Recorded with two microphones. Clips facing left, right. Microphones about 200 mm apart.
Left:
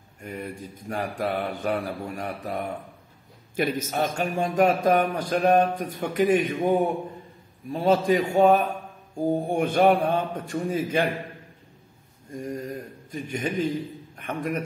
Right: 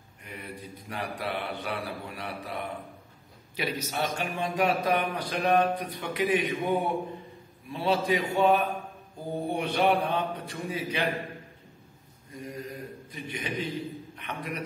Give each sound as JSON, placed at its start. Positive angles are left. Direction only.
{"t": 0.2, "sound": "a man's voice", "side_deg": 45}
{"t": 12.3, "sound": "a man's voice", "side_deg": 45}